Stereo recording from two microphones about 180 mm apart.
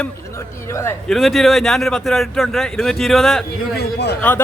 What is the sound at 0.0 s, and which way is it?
Speech, 15° left (ahead or behind).